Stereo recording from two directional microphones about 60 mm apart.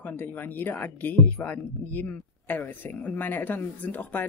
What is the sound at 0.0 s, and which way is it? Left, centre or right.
Speech, left.